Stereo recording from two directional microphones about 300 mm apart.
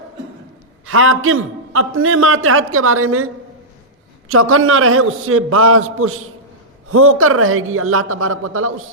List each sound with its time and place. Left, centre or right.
0.9 s a man's voice: right
4.3 s a man's voice: right